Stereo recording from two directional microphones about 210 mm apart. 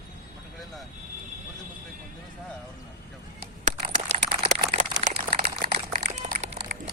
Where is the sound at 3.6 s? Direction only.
35° right (ahead or behind).